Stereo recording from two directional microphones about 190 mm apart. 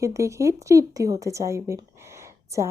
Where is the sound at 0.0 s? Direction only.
15° right (ahead or behind).